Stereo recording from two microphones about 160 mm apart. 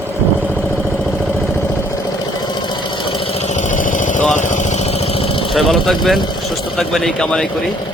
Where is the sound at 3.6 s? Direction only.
55° left (ahead or behind).